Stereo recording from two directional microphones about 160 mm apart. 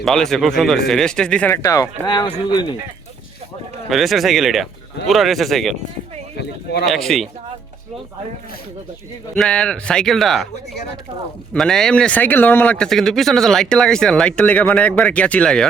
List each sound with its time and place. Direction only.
0.0 s speech: 5° left (ahead or behind); by 2.3 s 25° left (ahead or behind)
3.8 s speech: centre (ahead or behind)
6.3 s a sound: 90° left
6.8 s speech: centre (ahead or behind)
9.3 s speech: 5° left (ahead or behind)
11.5 s speech: 5° left (ahead or behind)